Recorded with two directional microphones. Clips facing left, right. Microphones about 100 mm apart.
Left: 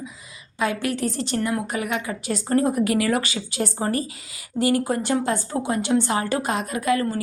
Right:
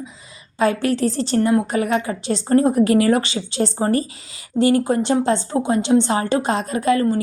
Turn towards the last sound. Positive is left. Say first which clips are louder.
# right 5 dB
turn(degrees=-30)  # may be behind; listen again after turning